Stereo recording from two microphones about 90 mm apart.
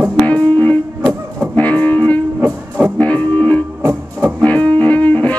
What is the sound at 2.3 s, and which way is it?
Music, 15° right (ahead or behind).